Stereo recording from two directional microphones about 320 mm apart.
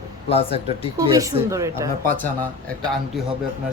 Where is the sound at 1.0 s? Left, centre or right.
Centre.